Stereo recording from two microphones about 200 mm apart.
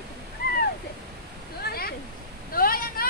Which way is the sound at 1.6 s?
50° left (ahead or behind).